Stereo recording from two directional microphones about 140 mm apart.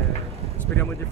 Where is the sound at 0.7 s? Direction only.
20° left (ahead or behind).